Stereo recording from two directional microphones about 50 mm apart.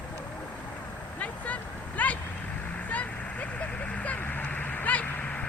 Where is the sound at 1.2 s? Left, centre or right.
Left.